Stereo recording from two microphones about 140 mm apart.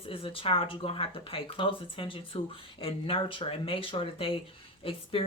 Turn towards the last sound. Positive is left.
turn(degrees=40)  # may be behind; listen again after turning